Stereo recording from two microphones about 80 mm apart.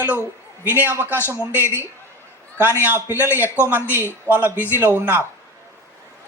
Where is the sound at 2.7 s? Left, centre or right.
Right.